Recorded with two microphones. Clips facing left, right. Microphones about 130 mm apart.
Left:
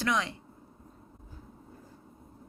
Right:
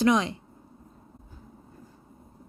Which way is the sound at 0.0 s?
20° right (ahead or behind).